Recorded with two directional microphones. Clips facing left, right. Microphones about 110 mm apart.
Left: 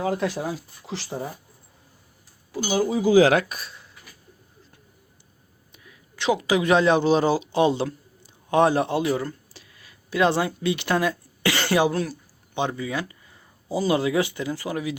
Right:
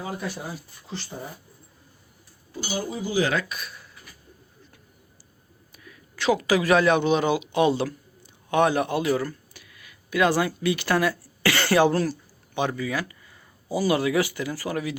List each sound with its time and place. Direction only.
0.0 s speech: 85° left
2.5 s speech: 90° left
5.7 s a man's voice: 20° left (ahead or behind)
11.9 s speech: centre (ahead or behind)
12.5 s speech: 25° left (ahead or behind)